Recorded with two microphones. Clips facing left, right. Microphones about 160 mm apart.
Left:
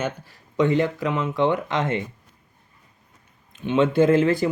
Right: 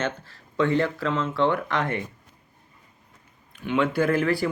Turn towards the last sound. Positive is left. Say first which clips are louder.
# left 5 dB
turn(degrees=20)  # may be behind; listen again after turning